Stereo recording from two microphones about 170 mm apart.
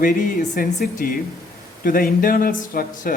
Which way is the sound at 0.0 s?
55° left (ahead or behind).